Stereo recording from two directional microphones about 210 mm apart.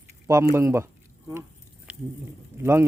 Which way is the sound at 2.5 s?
10° right (ahead or behind).